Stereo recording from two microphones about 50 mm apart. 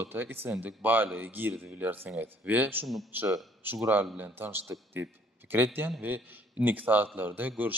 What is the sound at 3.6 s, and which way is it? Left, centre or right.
A man's voice, right.